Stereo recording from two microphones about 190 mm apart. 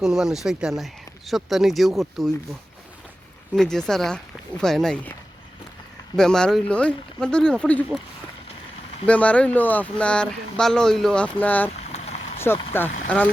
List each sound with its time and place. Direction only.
0.0 s speech: 5° right (ahead or behind)
6.1 s speech: 5° left (ahead or behind)
9.0 s speech: 5° left (ahead or behind)
11.8 s vehicle: 35° left (ahead or behind)
12.5 s speech: 10° left (ahead or behind)